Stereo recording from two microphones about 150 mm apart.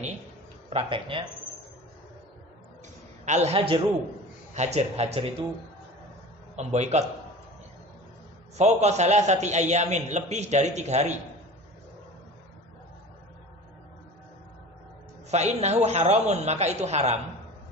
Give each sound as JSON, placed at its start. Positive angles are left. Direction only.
{"t": 0.7, "sound": "speech", "side_deg": -40}
{"t": 3.3, "sound": "a man's voice", "side_deg": -50}
{"t": 6.5, "sound": "a man's voice", "side_deg": -50}
{"t": 8.5, "sound": "a man's voice", "side_deg": -50}
{"t": 15.3, "sound": "a man's voice", "side_deg": -50}